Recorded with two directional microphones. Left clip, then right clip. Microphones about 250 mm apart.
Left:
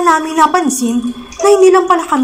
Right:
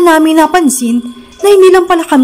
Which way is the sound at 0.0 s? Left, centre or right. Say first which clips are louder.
Right 4 dB; right.